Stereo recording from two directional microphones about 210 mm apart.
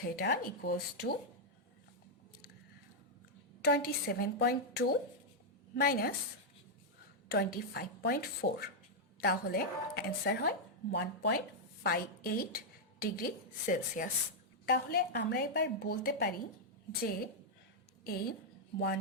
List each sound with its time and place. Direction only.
0.0 s a woman's voice: 45° left (ahead or behind)
3.6 s a woman's voice: 50° left (ahead or behind)
7.3 s a woman's voice: 50° left (ahead or behind)
18.0 s a woman's voice: 45° left (ahead or behind)